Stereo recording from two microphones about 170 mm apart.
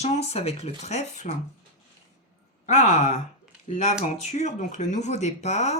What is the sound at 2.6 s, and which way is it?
Speech, 45° left (ahead or behind).